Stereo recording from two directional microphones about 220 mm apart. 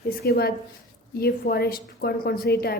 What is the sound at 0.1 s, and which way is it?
A woman's voice, 45° left (ahead or behind).